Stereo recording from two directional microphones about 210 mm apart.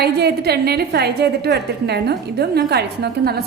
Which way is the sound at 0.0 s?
50° right (ahead or behind).